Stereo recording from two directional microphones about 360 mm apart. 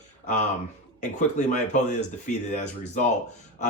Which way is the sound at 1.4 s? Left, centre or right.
Centre.